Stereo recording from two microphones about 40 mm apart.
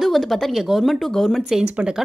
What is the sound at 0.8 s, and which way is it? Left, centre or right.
Speech, centre.